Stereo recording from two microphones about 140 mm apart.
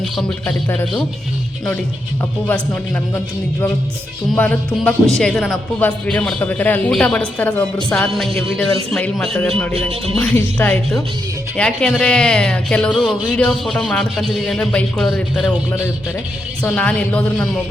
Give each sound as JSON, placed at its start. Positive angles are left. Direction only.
{"t": 0.4, "sound": "speech", "side_deg": 15}
{"t": 4.3, "sound": "speech", "side_deg": 5}
{"t": 10.3, "sound": "speech", "side_deg": 15}
{"t": 16.6, "sound": "speech", "side_deg": 10}